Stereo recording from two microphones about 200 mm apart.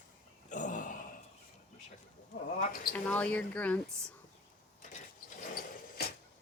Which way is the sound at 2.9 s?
5° left (ahead or behind).